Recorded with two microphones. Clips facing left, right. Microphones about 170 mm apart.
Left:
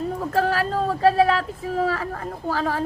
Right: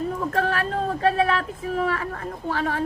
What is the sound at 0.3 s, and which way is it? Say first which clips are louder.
Speech: left 4 dB; 35° left (ahead or behind).